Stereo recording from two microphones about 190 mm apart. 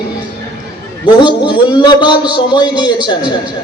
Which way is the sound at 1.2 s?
25° left (ahead or behind).